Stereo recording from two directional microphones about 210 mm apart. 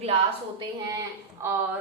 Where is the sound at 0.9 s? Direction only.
10° right (ahead or behind).